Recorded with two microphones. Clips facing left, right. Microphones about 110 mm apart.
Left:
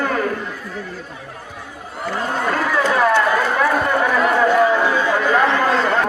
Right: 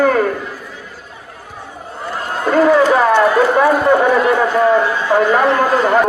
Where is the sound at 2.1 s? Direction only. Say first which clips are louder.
Right 1 dB; centre (ahead or behind).